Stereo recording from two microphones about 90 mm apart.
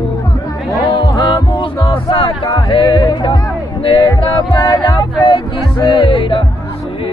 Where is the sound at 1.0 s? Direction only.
60° left (ahead or behind).